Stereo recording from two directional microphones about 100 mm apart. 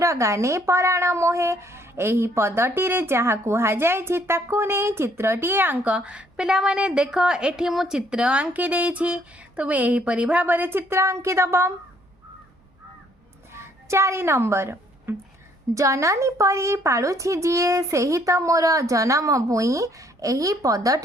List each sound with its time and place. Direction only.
0.0 s speech: 30° right (ahead or behind)
13.5 s a sound: 30° right (ahead or behind)
15.7 s a woman's voice: 30° right (ahead or behind)